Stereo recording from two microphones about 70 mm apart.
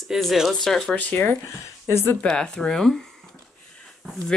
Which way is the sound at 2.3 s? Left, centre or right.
Centre.